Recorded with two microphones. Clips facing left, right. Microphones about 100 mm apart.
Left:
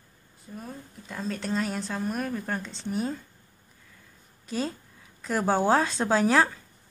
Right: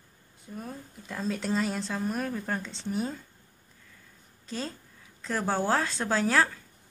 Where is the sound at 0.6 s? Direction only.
Centre (ahead or behind).